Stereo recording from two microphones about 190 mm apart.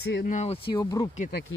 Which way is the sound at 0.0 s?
60° left (ahead or behind).